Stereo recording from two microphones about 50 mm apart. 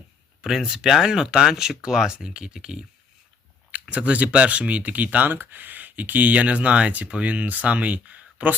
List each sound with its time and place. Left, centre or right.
0.4 s speech: centre
3.8 s speech: right
5.3 s speech: right